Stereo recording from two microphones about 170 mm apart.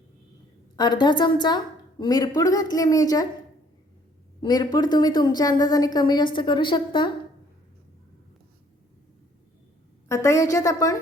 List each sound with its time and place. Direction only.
0.8 s a woman's voice: 25° left (ahead or behind)
4.4 s a woman's voice: 25° left (ahead or behind)
10.1 s a woman's voice: 15° left (ahead or behind)